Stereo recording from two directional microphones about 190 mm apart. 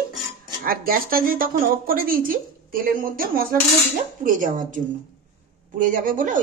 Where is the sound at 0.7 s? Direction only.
50° right (ahead or behind).